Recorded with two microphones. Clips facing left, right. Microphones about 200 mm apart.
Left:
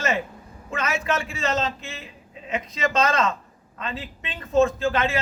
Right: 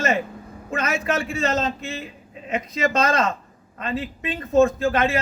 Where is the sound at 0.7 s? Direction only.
40° right (ahead or behind).